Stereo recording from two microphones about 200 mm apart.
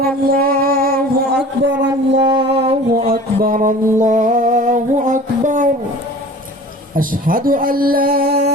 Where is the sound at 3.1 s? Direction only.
45° right (ahead or behind).